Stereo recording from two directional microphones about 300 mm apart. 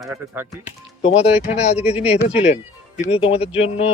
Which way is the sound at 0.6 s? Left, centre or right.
Left.